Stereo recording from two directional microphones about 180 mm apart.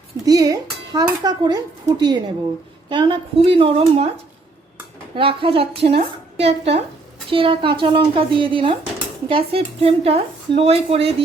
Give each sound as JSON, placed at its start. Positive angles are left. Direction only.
{"t": 0.3, "sound": "a woman's voice", "side_deg": -20}
{"t": 5.1, "sound": "a woman's voice", "side_deg": -30}